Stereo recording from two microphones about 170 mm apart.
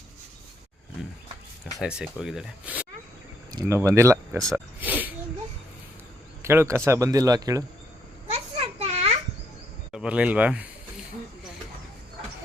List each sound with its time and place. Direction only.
1.8 s speech: 5° right (ahead or behind)
3.5 s speech: 20° right (ahead or behind)
4.5 s a sound: 10° right (ahead or behind)
6.4 s a man's voice: 15° right (ahead or behind)
8.3 s children playing: 35° right (ahead or behind)
9.9 s speech: 5° right (ahead or behind)